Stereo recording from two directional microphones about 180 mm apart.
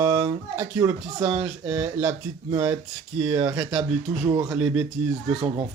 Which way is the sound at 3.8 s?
40° right (ahead or behind).